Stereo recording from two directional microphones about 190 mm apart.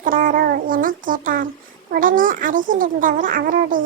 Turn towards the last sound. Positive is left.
turn(degrees=-45)  # may be behind; listen again after turning